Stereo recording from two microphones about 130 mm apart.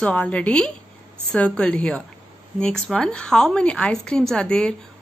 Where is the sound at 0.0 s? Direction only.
10° left (ahead or behind).